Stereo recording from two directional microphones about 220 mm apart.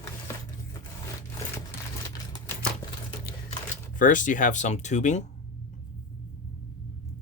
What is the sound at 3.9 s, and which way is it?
Speech, 35° left (ahead or behind).